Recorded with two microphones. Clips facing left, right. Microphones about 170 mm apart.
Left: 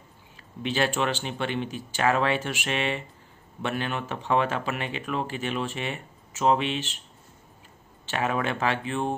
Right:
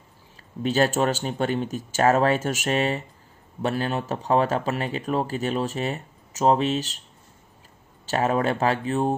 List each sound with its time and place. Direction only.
0.6 s speech: 40° right (ahead or behind)
8.0 s speech: 40° right (ahead or behind)